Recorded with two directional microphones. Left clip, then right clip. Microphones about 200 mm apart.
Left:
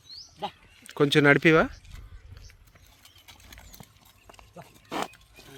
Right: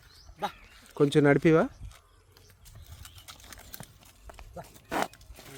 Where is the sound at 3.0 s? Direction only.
5° right (ahead or behind).